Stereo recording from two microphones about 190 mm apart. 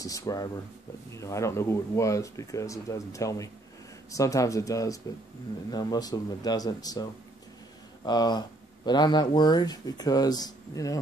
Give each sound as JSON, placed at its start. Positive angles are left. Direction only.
{"t": 0.0, "sound": "speech", "side_deg": 20}